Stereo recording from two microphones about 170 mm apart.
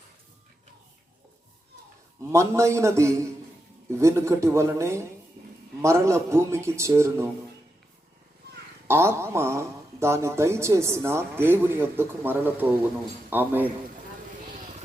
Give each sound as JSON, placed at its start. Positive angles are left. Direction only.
{"t": 2.3, "sound": "speech", "side_deg": -15}
{"t": 8.9, "sound": "speech", "side_deg": -15}